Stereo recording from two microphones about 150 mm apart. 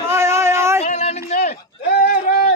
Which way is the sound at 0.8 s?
45° left (ahead or behind).